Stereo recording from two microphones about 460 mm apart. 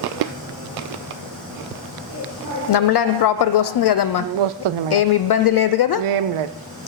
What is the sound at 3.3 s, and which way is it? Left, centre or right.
Speech, left.